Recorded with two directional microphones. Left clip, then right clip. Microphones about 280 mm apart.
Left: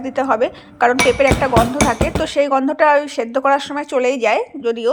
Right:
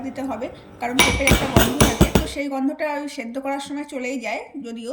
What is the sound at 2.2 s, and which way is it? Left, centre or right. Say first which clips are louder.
Speech: left 10 dB; centre.